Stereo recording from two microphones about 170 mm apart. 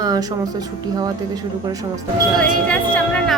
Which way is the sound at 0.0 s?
20° right (ahead or behind).